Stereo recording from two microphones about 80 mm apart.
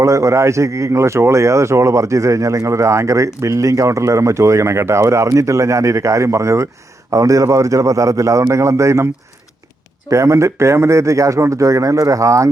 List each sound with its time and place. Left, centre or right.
0.0 s speech: right
10.1 s speech: right